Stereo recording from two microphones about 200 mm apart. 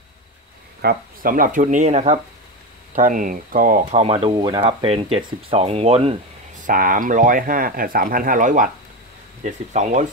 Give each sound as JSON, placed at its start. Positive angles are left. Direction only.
{"t": 0.8, "sound": "speech", "side_deg": -45}
{"t": 6.6, "sound": "speech", "side_deg": -45}